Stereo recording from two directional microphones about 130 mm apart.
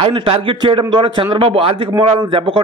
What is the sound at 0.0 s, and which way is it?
A man's voice, 40° right (ahead or behind).